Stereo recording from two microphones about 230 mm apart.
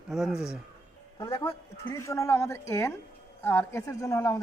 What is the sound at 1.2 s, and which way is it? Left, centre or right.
Speech, centre.